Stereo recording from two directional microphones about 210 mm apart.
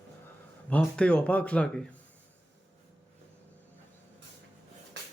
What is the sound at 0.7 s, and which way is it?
Speech, 5° left (ahead or behind).